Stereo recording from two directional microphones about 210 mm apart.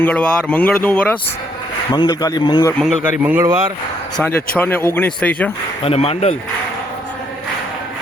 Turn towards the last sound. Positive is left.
turn(degrees=25)  # may be behind; listen again after turning